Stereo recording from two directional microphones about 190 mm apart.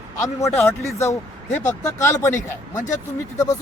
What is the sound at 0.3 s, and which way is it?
Speech, 15° left (ahead or behind).